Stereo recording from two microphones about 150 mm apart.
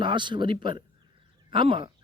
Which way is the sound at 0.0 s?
30° right (ahead or behind).